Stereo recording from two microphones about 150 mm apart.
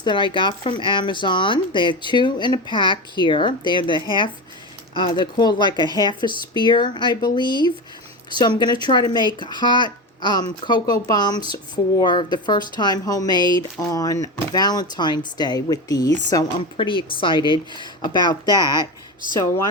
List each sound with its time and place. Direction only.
0.0 s speech: 30° left (ahead or behind)
5.8 s speech: 25° right (ahead or behind)
6.1 s speech: 30° left (ahead or behind)